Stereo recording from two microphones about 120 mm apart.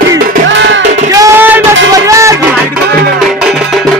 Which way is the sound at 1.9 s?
25° right (ahead or behind).